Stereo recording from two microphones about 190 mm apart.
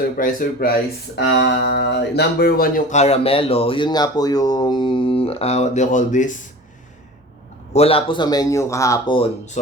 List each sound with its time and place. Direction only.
0.2 s speech: 45° left (ahead or behind)
7.7 s speech: 30° left (ahead or behind)